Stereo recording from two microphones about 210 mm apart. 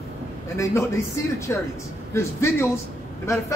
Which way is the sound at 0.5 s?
15° left (ahead or behind).